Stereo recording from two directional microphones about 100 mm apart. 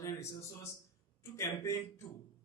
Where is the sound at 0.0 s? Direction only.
30° left (ahead or behind).